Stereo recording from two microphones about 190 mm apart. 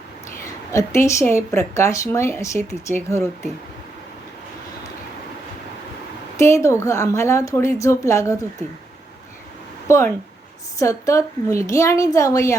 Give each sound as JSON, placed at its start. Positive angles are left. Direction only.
{"t": 0.3, "sound": "a woman's voice", "side_deg": 15}
{"t": 6.3, "sound": "a woman's voice", "side_deg": 15}
{"t": 9.9, "sound": "a woman's voice", "side_deg": 15}